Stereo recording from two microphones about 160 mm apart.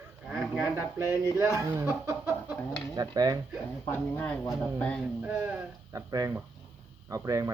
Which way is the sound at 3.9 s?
10° left (ahead or behind).